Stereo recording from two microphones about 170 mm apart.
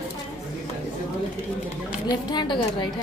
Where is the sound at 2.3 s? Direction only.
25° left (ahead or behind).